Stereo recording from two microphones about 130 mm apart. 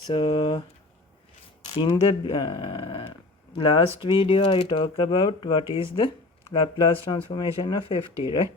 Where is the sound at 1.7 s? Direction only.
45° left (ahead or behind).